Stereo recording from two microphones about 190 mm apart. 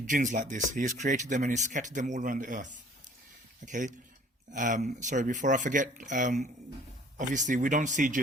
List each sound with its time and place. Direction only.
0.1 s speech: 40° right (ahead or behind)
3.7 s speech: 40° right (ahead or behind)